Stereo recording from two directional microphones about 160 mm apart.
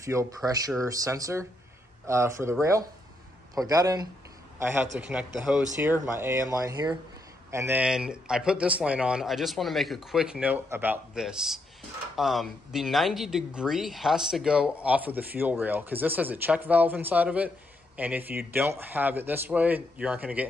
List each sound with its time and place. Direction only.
0.0 s speech: 20° right (ahead or behind)
3.5 s a man's voice: 25° right (ahead or behind)
7.5 s speech: 15° right (ahead or behind)